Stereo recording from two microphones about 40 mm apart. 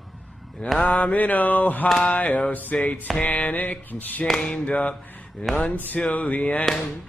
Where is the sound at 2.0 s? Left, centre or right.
Left.